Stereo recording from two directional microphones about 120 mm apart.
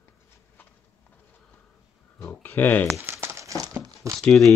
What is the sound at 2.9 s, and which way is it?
Crumpling, 15° right (ahead or behind).